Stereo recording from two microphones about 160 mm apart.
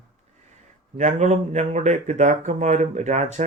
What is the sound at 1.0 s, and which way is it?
Speech, 50° right (ahead or behind).